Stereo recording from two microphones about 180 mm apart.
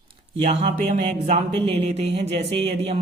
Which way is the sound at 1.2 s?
35° right (ahead or behind).